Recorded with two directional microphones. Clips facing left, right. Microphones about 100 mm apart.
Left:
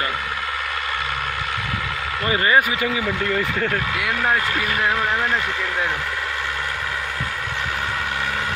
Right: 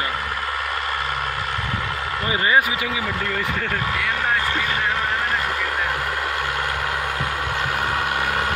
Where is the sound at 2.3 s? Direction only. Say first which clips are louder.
Left 1 dB; 20° right (ahead or behind).